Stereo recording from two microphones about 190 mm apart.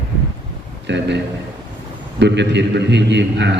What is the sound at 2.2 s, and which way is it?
A man's voice, 65° right (ahead or behind).